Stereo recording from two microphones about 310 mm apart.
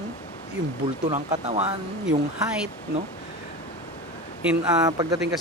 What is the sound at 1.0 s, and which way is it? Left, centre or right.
Speech, right.